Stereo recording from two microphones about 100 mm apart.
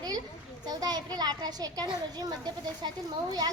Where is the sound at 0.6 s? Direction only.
40° right (ahead or behind).